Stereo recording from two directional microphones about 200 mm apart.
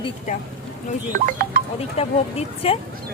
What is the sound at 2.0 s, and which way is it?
Speech, 30° left (ahead or behind).